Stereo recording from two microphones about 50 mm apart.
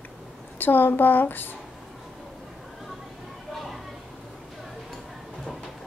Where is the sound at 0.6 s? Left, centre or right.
Left.